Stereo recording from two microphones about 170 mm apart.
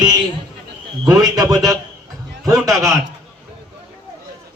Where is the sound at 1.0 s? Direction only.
20° right (ahead or behind).